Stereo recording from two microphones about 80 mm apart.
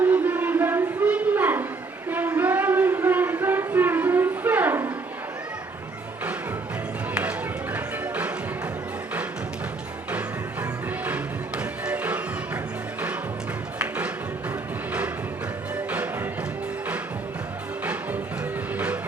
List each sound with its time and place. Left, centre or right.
0.0 s a sound: right
7.1 s music: centre
10.1 s music: centre
13.7 s music: centre
15.7 s music: centre